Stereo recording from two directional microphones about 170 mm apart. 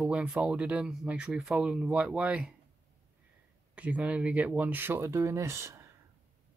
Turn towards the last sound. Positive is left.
turn(degrees=-15)  # may be behind; listen again after turning